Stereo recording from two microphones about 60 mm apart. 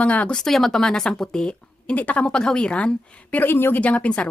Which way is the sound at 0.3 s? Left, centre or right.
Centre.